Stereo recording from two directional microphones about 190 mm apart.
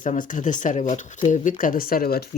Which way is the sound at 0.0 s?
40° left (ahead or behind).